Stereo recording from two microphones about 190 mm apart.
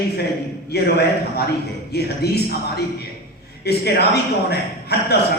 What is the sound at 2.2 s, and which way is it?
Speech, 60° left (ahead or behind).